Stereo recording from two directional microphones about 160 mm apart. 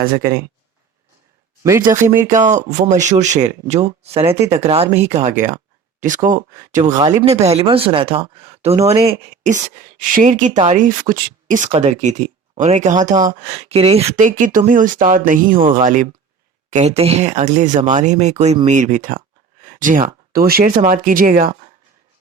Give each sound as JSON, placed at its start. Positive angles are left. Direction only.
{"t": 1.6, "sound": "speech", "side_deg": -20}
{"t": 2.3, "sound": "speech", "side_deg": -50}
{"t": 7.0, "sound": "speech", "side_deg": -30}
{"t": 19.6, "sound": "a sound", "side_deg": -55}
{"t": 20.3, "sound": "speech", "side_deg": -70}